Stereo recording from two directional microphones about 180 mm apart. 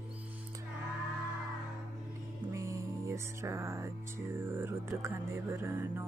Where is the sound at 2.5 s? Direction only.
15° right (ahead or behind).